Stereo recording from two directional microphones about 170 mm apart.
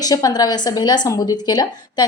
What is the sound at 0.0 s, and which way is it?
A woman's voice, 20° left (ahead or behind).